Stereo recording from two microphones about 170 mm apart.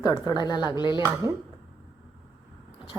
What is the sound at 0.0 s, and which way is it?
A woman's voice, 20° left (ahead or behind).